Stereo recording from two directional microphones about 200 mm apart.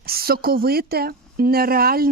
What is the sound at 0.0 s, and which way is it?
A woman's voice, 50° right (ahead or behind).